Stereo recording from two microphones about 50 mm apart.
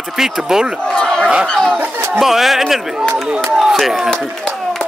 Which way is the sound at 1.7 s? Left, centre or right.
Right.